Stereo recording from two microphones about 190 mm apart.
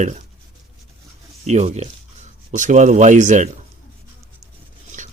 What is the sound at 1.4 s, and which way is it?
Speech, 35° right (ahead or behind).